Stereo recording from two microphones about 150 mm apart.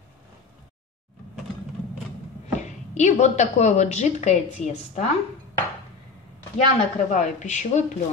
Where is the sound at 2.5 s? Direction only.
50° left (ahead or behind).